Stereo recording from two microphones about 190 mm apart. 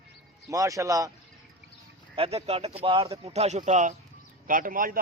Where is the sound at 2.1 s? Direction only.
30° right (ahead or behind).